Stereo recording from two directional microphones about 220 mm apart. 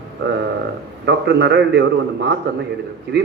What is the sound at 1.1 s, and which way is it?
Speech, 50° right (ahead or behind).